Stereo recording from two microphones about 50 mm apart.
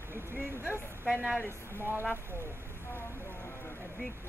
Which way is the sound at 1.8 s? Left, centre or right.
Right.